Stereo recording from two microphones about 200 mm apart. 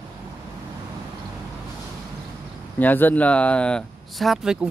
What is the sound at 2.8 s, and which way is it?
Speech, 10° left (ahead or behind).